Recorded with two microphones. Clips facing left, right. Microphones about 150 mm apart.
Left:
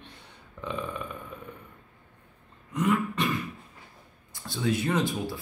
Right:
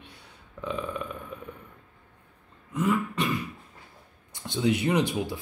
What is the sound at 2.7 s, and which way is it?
Beatboxing, 5° right (ahead or behind).